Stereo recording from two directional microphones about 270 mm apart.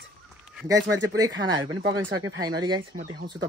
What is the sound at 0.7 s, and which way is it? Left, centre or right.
Speech, right.